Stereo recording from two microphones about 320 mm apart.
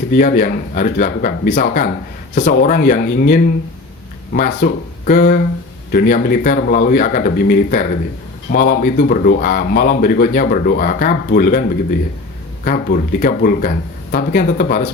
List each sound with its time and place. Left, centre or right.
0.1 s speech: left
12.6 s speech: left